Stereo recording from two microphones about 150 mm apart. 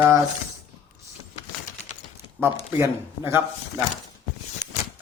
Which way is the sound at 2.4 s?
15° right (ahead or behind).